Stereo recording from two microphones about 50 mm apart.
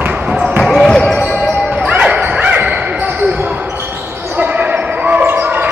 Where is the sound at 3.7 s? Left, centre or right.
Right.